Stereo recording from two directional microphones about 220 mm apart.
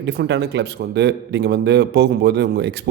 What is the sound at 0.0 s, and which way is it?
Speech, 50° right (ahead or behind).